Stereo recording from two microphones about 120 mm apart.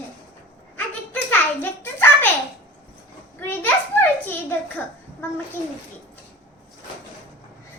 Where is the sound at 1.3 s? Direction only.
15° left (ahead or behind).